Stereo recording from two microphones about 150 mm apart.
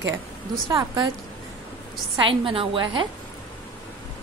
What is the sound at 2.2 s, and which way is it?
Speech, 35° right (ahead or behind).